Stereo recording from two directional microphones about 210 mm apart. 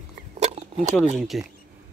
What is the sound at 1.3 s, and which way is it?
Speech, centre (ahead or behind).